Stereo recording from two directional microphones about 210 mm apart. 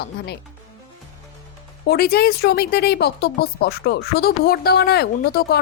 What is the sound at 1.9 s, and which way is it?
Speech, 45° left (ahead or behind).